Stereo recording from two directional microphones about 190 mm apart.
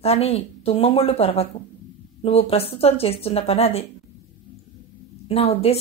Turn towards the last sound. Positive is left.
turn(degrees=35)  # may be behind; listen again after turning